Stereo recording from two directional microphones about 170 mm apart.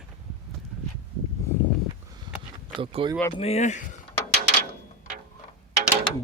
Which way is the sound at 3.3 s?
35° left (ahead or behind).